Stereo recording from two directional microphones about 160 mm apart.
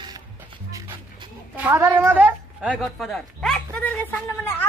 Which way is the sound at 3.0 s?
5° left (ahead or behind).